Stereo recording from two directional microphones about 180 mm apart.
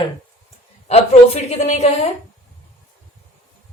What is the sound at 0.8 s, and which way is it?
A woman's voice, 35° left (ahead or behind).